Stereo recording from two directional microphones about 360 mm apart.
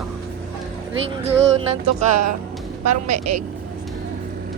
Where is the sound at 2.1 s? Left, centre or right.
Right.